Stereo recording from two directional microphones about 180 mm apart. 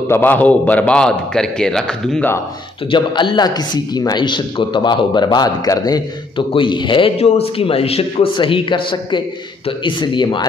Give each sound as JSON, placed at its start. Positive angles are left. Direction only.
{"t": 0.1, "sound": "a man's voice", "side_deg": 10}
{"t": 2.9, "sound": "speech", "side_deg": 25}